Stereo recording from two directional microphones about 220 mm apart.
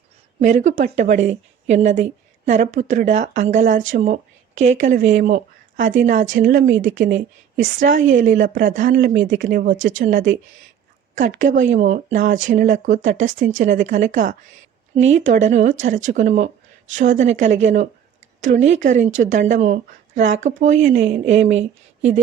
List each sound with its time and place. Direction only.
0.4 s speech: 35° right (ahead or behind)